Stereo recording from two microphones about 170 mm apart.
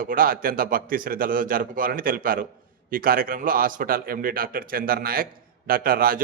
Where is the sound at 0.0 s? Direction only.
55° right (ahead or behind).